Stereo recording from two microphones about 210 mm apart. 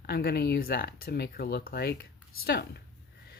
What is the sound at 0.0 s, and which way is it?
Speech, 45° left (ahead or behind).